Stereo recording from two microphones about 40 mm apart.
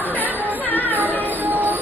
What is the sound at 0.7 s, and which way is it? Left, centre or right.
Music, left.